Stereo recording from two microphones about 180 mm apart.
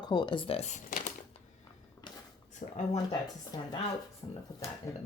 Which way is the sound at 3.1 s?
20° left (ahead or behind).